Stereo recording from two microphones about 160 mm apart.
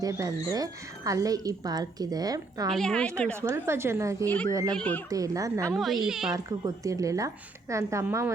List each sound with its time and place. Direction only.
0.0 s a woman's voice: 20° right (ahead or behind)
2.7 s speech: 5° left (ahead or behind)
3.3 s a woman's voice: 15° right (ahead or behind)
4.7 s speech: 10° left (ahead or behind)
5.0 s a woman's voice: 20° right (ahead or behind)
5.6 s speech: centre (ahead or behind)
6.3 s a woman's voice: 20° right (ahead or behind)